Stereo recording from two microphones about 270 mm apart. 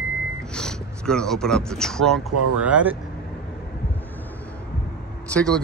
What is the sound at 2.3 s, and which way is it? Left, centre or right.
Speech, right.